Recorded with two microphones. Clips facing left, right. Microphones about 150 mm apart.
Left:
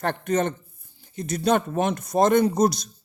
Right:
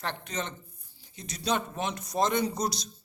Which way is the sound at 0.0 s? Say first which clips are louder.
Left 11 dB; 50° left (ahead or behind).